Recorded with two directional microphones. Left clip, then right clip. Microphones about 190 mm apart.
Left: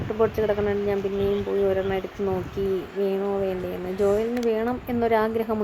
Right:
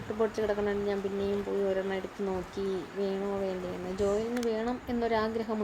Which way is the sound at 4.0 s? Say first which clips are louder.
Left 7 dB; 25° left (ahead or behind).